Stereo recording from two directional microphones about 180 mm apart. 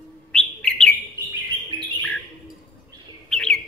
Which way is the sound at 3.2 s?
5° left (ahead or behind).